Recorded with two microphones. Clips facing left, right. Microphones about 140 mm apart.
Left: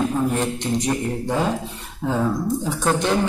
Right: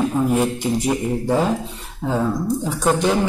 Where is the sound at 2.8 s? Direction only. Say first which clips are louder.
Right 3 dB; centre (ahead or behind).